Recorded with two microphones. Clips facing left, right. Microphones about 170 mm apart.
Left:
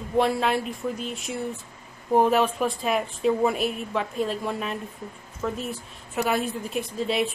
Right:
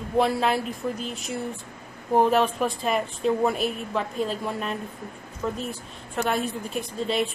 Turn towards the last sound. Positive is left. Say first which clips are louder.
# left 1 dB
turn(degrees=0)  # may be behind; listen again after turning